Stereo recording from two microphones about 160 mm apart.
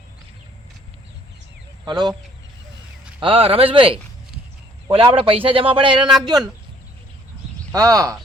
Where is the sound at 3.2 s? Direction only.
35° right (ahead or behind).